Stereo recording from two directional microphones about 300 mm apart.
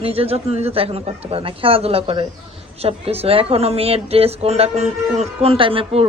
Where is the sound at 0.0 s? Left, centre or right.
Centre.